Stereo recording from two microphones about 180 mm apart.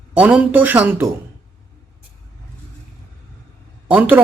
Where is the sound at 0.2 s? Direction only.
5° right (ahead or behind).